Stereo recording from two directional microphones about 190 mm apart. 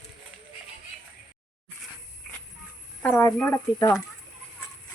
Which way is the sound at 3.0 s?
10° left (ahead or behind).